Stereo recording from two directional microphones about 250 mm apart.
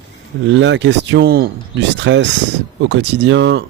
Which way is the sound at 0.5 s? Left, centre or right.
Right.